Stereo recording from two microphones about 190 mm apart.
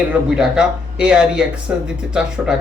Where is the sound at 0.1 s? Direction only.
5° right (ahead or behind).